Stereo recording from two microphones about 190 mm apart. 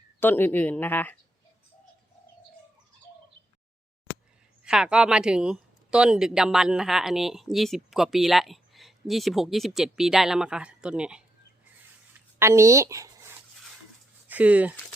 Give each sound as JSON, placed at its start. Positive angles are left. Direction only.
{"t": 0.2, "sound": "speech", "side_deg": 10}
{"t": 4.6, "sound": "speech", "side_deg": -5}
{"t": 12.4, "sound": "speech", "side_deg": -15}